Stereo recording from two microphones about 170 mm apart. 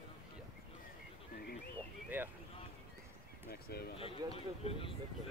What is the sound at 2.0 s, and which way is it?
Speech, 10° right (ahead or behind).